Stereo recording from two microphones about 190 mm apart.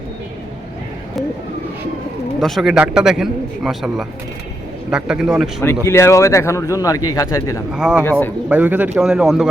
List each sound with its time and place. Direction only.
2.4 s a man's voice: centre (ahead or behind)
5.6 s speech: 15° left (ahead or behind)
7.7 s a man's voice: 5° right (ahead or behind)